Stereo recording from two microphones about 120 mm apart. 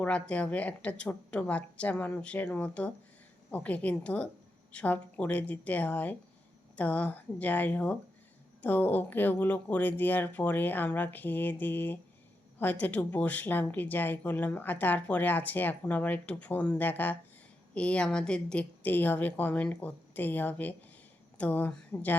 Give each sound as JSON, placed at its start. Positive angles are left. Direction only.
{"t": 0.0, "sound": "a woman's voice", "side_deg": 10}